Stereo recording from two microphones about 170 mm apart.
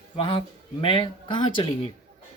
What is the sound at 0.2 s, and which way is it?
Speech, 30° left (ahead or behind).